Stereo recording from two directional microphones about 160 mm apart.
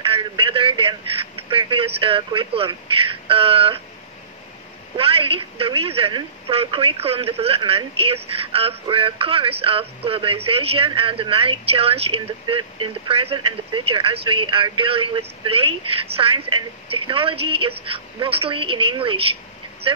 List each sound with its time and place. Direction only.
0.1 s a sound: 35° right (ahead or behind)
2.0 s a woman's voice: 35° right (ahead or behind)
4.9 s a woman's voice: 35° right (ahead or behind)